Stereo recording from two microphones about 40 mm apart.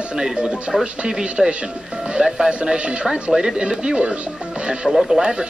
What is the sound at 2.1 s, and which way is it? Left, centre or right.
Speech, centre.